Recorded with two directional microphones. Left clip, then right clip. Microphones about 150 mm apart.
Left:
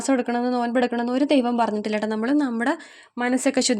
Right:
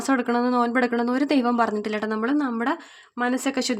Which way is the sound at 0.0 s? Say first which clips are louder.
Even; 30° left (ahead or behind).